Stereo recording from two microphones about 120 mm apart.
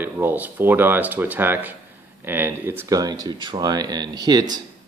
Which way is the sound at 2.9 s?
30° right (ahead or behind).